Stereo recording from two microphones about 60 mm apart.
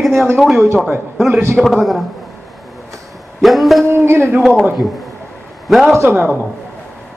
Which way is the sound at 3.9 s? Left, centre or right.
Right.